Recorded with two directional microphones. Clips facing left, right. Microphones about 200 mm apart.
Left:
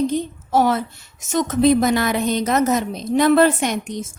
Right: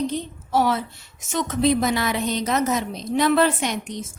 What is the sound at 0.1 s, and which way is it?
A woman's voice, 45° left (ahead or behind).